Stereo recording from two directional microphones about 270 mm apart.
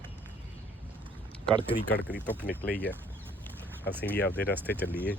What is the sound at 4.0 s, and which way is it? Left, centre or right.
Speech, centre.